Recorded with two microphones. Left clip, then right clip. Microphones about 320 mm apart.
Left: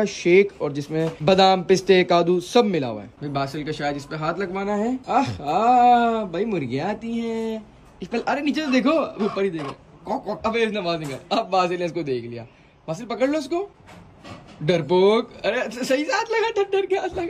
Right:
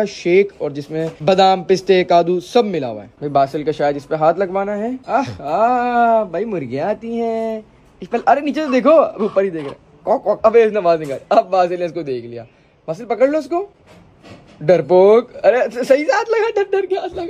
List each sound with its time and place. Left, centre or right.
0.0 s speech: centre
3.2 s a man's voice: centre
8.3 s a man's voice: centre
8.7 s speech: centre
10.9 s a man's voice: centre
11.2 s a man's voice: centre
14.9 s speech: centre